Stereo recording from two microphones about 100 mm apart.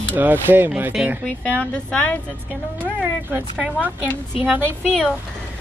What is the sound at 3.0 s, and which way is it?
Speech, 15° right (ahead or behind).